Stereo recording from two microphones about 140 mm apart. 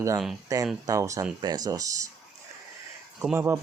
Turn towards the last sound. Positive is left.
turn(degrees=-15)  # may be behind; listen again after turning